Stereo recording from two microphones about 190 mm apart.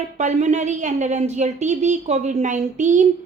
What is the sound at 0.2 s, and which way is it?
A woman's voice, 35° right (ahead or behind).